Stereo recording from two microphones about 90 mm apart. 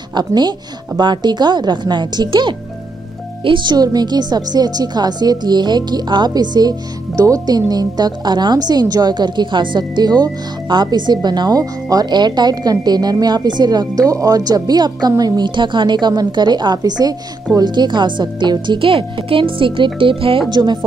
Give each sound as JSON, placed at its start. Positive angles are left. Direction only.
{"t": 0.1, "sound": "speech", "side_deg": -50}
{"t": 3.7, "sound": "speech", "side_deg": -45}